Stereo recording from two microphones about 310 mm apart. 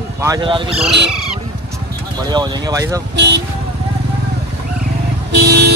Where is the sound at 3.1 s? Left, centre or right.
Right.